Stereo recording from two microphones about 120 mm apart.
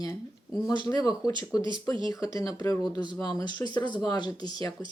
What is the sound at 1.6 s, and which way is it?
Speech, 40° right (ahead or behind).